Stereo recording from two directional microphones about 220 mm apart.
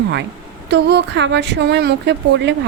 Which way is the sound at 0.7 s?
50° right (ahead or behind).